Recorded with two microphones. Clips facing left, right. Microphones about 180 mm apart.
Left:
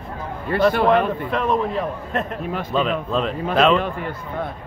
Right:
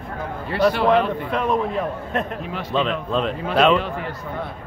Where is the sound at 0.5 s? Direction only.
50° left (ahead or behind).